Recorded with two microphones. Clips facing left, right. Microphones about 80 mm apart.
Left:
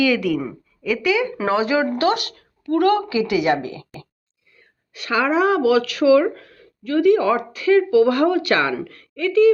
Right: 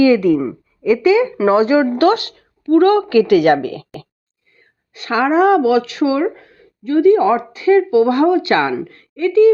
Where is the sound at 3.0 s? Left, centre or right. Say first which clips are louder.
Right 8 dB; right.